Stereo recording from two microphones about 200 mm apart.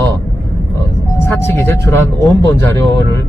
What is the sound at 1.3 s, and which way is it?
Speech, 10° left (ahead or behind).